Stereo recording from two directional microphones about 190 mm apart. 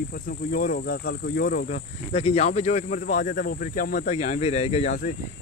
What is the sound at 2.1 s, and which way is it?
Speech, 35° left (ahead or behind).